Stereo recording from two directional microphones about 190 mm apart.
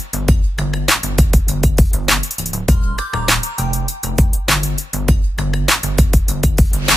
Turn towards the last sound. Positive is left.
turn(degrees=0)  # may be behind; listen again after turning